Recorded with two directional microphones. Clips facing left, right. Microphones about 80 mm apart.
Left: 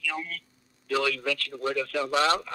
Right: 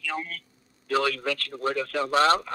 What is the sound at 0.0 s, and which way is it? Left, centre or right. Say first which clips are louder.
A man's voice: right 1 dB; right.